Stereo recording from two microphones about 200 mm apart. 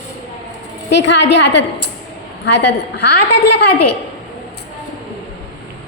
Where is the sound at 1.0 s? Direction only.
65° left (ahead or behind).